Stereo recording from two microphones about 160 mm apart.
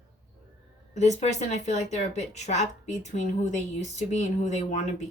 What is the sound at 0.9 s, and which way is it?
A woman's voice, 45° left (ahead or behind).